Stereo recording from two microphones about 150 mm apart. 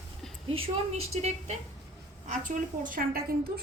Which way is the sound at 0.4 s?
40° right (ahead or behind).